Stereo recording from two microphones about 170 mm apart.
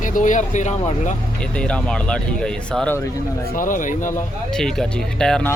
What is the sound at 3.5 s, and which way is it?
Speech, 50° left (ahead or behind).